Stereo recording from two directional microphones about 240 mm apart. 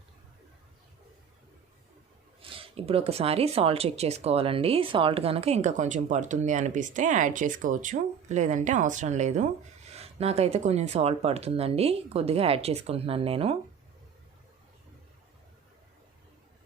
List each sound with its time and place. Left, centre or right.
2.4 s speech: right